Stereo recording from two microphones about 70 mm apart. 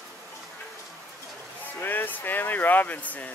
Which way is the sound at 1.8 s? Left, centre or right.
Left.